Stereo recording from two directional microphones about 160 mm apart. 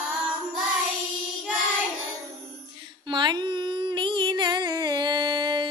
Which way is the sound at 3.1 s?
30° right (ahead or behind).